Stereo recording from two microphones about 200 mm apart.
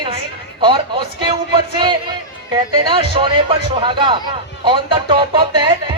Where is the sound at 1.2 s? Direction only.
25° right (ahead or behind).